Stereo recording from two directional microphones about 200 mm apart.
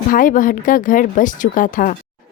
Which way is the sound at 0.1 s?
40° left (ahead or behind).